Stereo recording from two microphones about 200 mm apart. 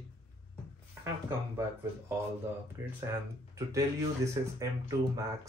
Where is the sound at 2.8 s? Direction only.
15° right (ahead or behind).